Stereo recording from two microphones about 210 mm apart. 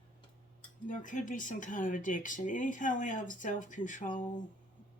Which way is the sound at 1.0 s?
40° left (ahead or behind).